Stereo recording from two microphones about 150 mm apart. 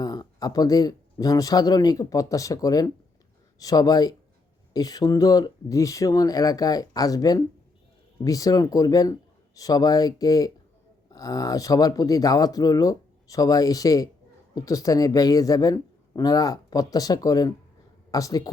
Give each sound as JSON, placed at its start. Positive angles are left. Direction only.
{"t": 0.0, "sound": "speech", "side_deg": 25}